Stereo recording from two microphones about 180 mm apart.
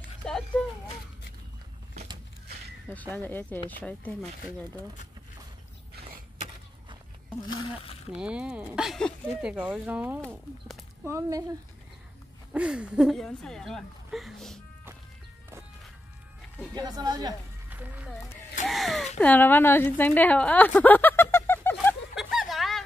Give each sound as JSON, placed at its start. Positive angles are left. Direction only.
{"t": 0.2, "sound": "a sound", "side_deg": 5}
{"t": 2.9, "sound": "speech", "side_deg": 10}
{"t": 8.1, "sound": "a woman's voice", "side_deg": -5}
{"t": 12.5, "sound": "speech", "side_deg": -5}
{"t": 16.7, "sound": "a woman's voice", "side_deg": -20}
{"t": 17.6, "sound": "music", "side_deg": -10}
{"t": 18.7, "sound": "a woman's voice", "side_deg": 0}
{"t": 22.1, "sound": "a sound", "side_deg": -5}